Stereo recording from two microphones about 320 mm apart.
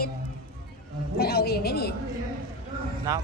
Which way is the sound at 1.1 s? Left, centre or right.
Left.